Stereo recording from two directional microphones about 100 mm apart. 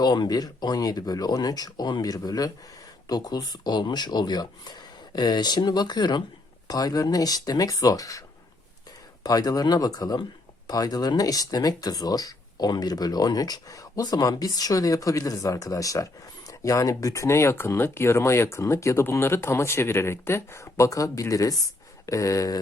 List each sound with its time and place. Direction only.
0.0 s speech: 45° left (ahead or behind)
9.2 s speech: 35° left (ahead or behind)